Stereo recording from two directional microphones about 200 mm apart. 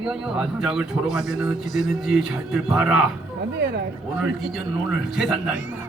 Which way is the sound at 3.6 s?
55° right (ahead or behind).